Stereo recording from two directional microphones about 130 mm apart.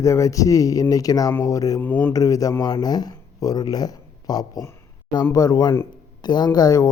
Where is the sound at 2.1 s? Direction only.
25° left (ahead or behind).